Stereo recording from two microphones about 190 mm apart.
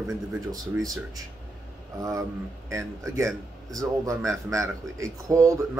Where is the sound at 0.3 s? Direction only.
20° right (ahead or behind).